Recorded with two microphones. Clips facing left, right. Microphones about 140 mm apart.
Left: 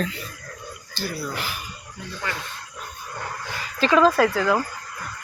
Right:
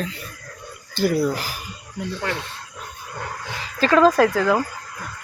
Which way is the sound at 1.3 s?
35° right (ahead or behind).